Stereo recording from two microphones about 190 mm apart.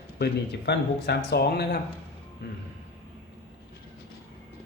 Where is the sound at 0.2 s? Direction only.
60° left (ahead or behind).